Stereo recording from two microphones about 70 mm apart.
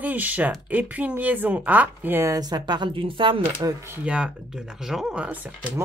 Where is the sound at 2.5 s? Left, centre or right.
Right.